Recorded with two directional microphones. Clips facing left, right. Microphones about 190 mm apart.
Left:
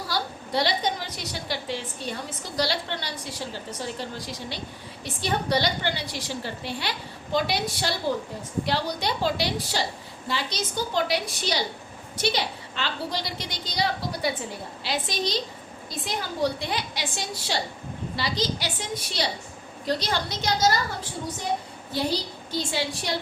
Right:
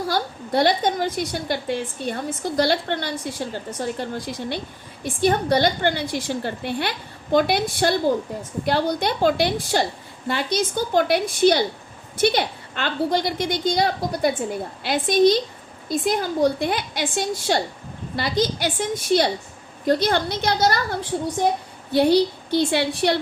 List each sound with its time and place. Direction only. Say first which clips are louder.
0.1 s a woman's voice: right 2 dB; 50° right (ahead or behind)
21.9 s a woman's voice: right 11 dB; 65° right (ahead or behind)